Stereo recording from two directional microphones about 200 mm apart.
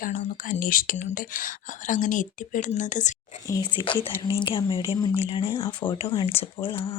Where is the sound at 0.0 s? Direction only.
40° left (ahead or behind).